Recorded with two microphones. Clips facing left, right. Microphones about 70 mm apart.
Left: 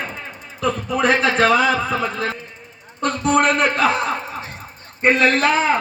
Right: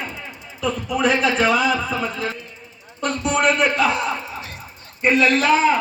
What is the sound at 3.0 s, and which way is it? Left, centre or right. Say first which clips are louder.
A man's voice: left 2 dB; left.